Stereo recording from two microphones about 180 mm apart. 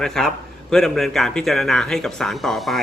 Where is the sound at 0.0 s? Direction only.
Centre (ahead or behind).